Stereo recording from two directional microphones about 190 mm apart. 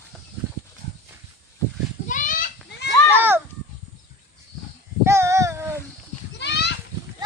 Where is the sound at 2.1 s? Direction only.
45° left (ahead or behind).